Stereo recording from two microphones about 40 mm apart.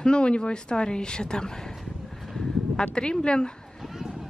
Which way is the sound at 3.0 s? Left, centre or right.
Left.